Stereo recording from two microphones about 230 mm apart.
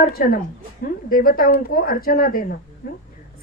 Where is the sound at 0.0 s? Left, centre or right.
Left.